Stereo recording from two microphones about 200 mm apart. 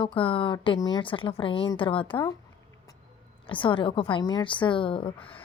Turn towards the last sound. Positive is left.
turn(degrees=25)  # may be behind; listen again after turning